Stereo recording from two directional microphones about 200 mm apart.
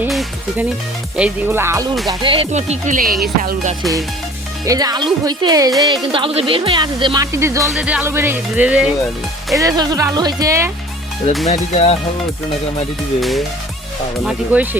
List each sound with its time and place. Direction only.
0.0 s music: 5° right (ahead or behind)
1.1 s speech: 10° right (ahead or behind)
2.0 s speech: 25° right (ahead or behind)
4.6 s speech: 20° right (ahead or behind)
7.3 s speech: 15° right (ahead or behind)
9.6 s speech: 20° right (ahead or behind)
11.4 s speech: 35° left (ahead or behind)
13.1 s speech: centre (ahead or behind)